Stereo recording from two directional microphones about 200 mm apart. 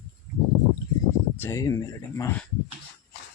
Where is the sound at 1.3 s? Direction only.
15° left (ahead or behind).